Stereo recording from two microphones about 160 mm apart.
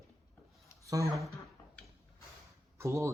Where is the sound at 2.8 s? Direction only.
20° right (ahead or behind).